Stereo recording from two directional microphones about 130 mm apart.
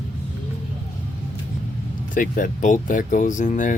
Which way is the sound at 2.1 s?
90° left.